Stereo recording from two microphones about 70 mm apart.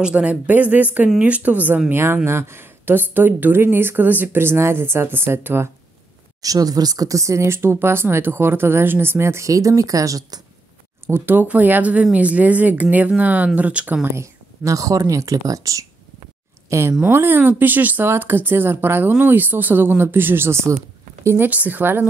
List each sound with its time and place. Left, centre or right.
0.0 s a woman's voice: centre; by 5.7 s right
6.4 s a woman's voice: right
9.5 s speech: right
11.1 s a woman's voice: right
14.0 s speech: right
16.6 s speech: right
17.0 s a woman's voice: right
21.5 s speech: right